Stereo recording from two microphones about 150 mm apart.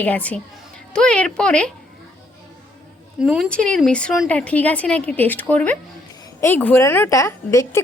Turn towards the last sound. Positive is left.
turn(degrees=20)  # may be behind; listen again after turning